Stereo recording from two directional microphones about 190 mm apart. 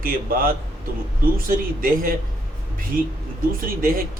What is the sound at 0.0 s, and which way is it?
Speech, 50° right (ahead or behind).